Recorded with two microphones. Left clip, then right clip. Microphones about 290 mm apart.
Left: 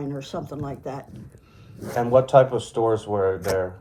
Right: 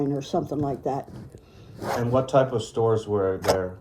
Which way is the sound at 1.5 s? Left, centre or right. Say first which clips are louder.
Right 2 dB; centre.